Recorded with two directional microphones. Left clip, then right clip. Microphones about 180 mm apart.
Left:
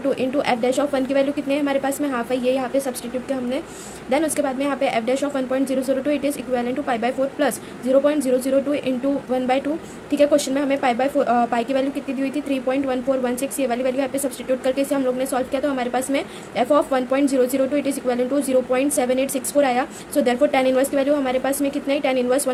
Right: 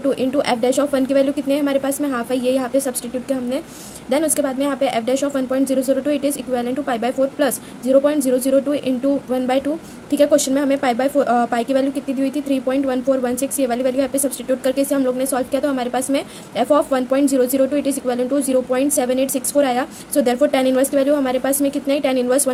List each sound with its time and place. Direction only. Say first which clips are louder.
0.1 s a woman's voice: right 2 dB; 35° right (ahead or behind)